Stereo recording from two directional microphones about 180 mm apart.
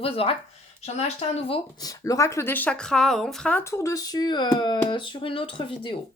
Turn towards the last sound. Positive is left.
turn(degrees=30)  # may be behind; listen again after turning